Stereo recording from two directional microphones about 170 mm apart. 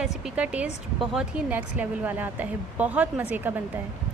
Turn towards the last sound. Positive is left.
turn(degrees=-10)  # may be behind; listen again after turning